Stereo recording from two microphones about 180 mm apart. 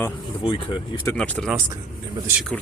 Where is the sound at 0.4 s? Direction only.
25° left (ahead or behind).